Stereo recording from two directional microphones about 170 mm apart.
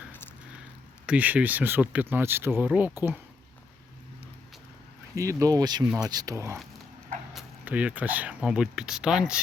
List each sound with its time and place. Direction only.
1.0 s speech: 10° right (ahead or behind)
5.1 s speech: 20° right (ahead or behind)